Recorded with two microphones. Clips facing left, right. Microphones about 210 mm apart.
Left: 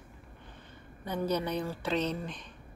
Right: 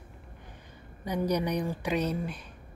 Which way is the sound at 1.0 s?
15° right (ahead or behind).